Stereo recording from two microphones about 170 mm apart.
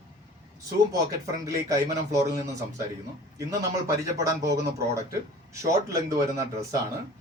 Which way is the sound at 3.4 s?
20° right (ahead or behind).